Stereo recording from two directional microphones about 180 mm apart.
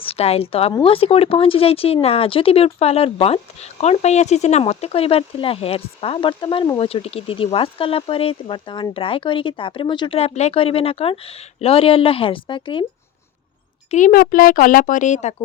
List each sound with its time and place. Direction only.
0.0 s a woman's voice: 35° left (ahead or behind)
13.9 s speech: 50° left (ahead or behind)